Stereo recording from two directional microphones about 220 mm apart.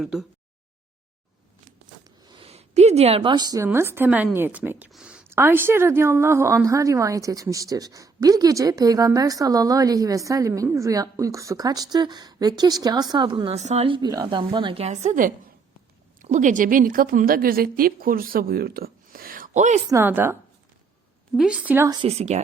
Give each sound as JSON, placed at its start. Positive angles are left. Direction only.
{"t": 0.0, "sound": "a woman's voice", "side_deg": -5}
{"t": 2.0, "sound": "a woman's voice", "side_deg": -25}
{"t": 19.9, "sound": "a woman's voice", "side_deg": -10}
{"t": 21.3, "sound": "a woman's voice", "side_deg": -5}
{"t": 22.0, "sound": "a woman's voice", "side_deg": -30}